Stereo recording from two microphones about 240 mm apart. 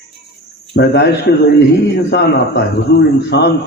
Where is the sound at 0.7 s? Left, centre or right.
Left.